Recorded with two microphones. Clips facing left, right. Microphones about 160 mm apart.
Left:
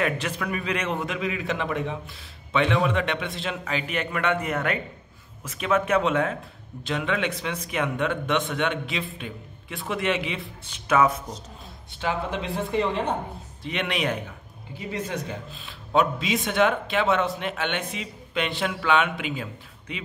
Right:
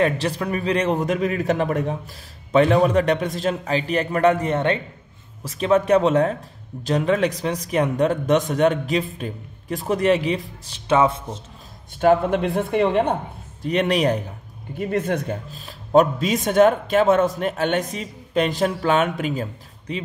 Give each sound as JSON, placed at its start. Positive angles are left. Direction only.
{"t": 0.0, "sound": "a man's voice", "side_deg": -35}
{"t": 12.0, "sound": "speech", "side_deg": -50}
{"t": 13.6, "sound": "a man's voice", "side_deg": -40}
{"t": 14.8, "sound": "a man's voice", "side_deg": -55}
{"t": 15.5, "sound": "a man's voice", "side_deg": -40}